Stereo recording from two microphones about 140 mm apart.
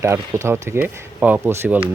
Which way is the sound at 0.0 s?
20° right (ahead or behind).